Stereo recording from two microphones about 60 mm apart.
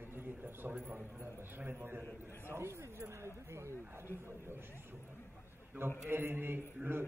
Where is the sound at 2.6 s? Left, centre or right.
Right.